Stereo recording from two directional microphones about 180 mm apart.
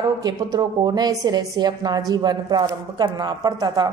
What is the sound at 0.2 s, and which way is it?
A woman's voice, 20° right (ahead or behind).